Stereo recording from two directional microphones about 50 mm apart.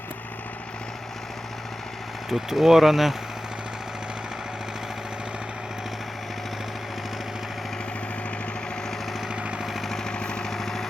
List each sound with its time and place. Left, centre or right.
2.3 s speech: centre
9.3 s engine: right
9.7 s engine: centre
10.5 s vehicle: centre